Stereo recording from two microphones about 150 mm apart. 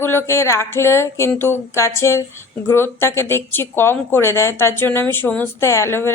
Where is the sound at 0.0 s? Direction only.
15° left (ahead or behind).